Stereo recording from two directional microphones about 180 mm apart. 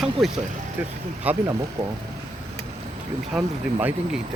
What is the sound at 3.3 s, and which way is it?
Speech, 5° right (ahead or behind).